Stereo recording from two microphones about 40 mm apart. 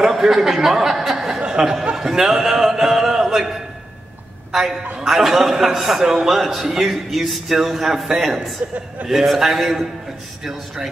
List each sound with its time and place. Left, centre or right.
0.0 s a woman's voice: centre
8.6 s a man's voice: right
9.0 s a man's voice: centre